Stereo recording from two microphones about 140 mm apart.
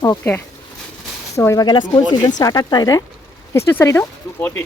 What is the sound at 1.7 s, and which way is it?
Speech, 35° left (ahead or behind).